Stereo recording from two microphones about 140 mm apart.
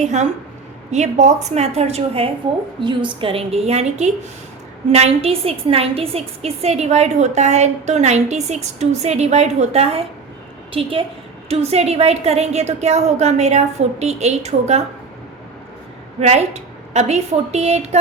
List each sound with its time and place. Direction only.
0.0 s a woman's voice: 55° right (ahead or behind)
16.2 s a woman's voice: 50° right (ahead or behind)